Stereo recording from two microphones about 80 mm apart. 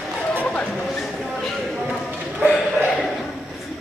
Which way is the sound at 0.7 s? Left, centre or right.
Centre.